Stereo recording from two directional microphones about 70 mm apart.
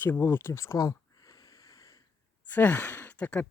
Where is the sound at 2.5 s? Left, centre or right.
Left.